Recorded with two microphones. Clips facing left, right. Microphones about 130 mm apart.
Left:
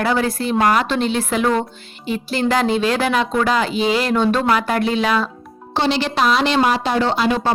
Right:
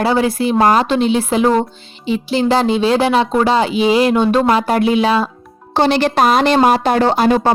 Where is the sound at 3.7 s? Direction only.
10° right (ahead or behind).